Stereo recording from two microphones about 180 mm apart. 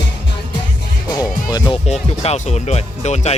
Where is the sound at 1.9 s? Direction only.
35° left (ahead or behind).